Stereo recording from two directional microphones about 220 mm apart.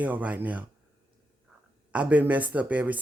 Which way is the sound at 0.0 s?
5° right (ahead or behind).